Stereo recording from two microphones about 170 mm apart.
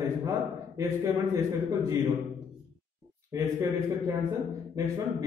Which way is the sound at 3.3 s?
20° right (ahead or behind).